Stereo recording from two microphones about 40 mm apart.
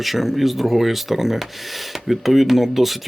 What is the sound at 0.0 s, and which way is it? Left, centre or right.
Speech, centre.